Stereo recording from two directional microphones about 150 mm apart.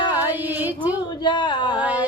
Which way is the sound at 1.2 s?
30° left (ahead or behind).